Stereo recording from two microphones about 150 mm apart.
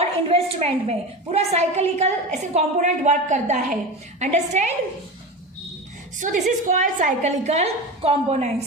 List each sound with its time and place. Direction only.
0.3 s a woman's voice: 40° right (ahead or behind)
6.1 s a woman's voice: 60° right (ahead or behind)